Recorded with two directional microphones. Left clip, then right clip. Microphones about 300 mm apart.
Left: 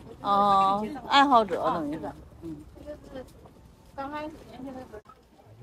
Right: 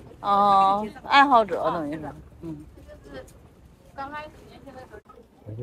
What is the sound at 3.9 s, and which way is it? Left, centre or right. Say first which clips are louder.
Speech: right 1 dB; left.